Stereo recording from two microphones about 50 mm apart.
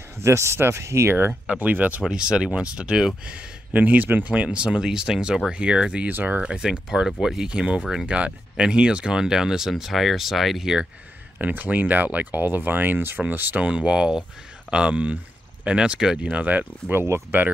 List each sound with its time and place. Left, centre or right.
0.2 s speech: right
1.5 s speech: right
2.0 s speech: centre
6.0 s speech: right
6.4 s speech: centre
11.3 s speech: right
13.6 s speech: right
16.2 s speech: right
17.3 s speech: right